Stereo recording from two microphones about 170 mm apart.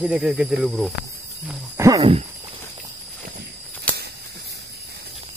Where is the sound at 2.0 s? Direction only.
35° right (ahead or behind).